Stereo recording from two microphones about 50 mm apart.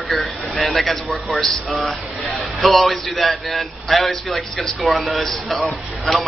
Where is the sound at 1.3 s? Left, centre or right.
Centre.